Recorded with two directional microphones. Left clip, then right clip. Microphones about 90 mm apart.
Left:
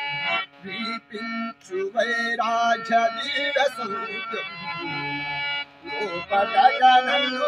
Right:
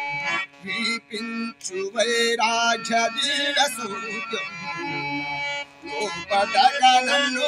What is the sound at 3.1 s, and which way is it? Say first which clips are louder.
Music: right 2 dB; 45° right (ahead or behind).